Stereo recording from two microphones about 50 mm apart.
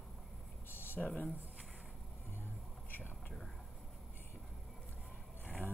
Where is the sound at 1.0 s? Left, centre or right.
Centre.